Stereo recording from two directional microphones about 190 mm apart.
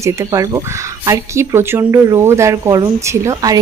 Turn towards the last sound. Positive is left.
turn(degrees=-20)  # may be behind; listen again after turning